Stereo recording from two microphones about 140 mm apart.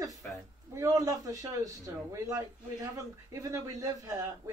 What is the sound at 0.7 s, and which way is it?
A man's voice, 20° right (ahead or behind).